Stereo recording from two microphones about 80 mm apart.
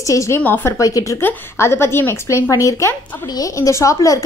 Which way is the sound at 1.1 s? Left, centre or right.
Left.